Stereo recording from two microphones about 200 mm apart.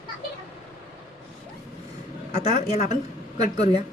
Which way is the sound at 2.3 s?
35° left (ahead or behind).